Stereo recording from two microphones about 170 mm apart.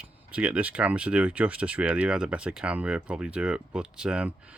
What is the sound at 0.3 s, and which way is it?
Speech, 10° right (ahead or behind).